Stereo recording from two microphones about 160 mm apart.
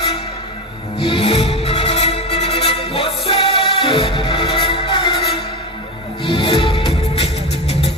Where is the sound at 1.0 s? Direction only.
35° left (ahead or behind).